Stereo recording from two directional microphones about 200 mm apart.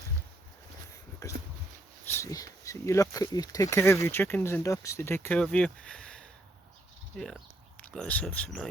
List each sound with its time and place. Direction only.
1.2 s dog: 15° left (ahead or behind)
2.1 s speech: 15° left (ahead or behind)